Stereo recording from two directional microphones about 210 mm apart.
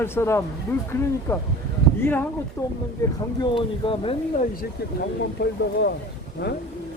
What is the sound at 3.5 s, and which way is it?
Speech, 25° left (ahead or behind).